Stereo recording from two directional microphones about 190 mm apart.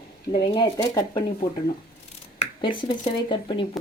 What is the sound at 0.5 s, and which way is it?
Speech, 20° left (ahead or behind).